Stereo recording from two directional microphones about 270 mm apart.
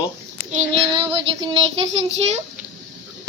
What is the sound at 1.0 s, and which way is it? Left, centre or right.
Child singing, centre.